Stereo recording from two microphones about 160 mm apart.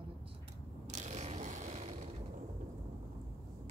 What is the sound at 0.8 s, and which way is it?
Mechanisms, 45° right (ahead or behind).